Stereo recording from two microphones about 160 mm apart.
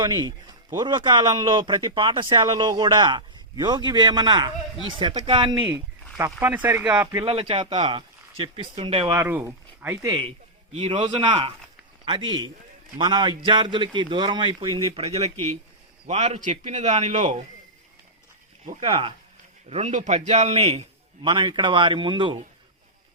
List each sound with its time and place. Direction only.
0.0 s a man's voice: 25° right (ahead or behind)
6.4 s speech: 10° right (ahead or behind)
7.3 s speech: 35° right (ahead or behind)
9.1 s speech: 15° right (ahead or behind)
10.2 s a man's voice: 40° right (ahead or behind)
14.9 s a man's voice: 40° right (ahead or behind)
18.8 s speech: 35° right (ahead or behind)
19.6 s a man's voice: 45° right (ahead or behind)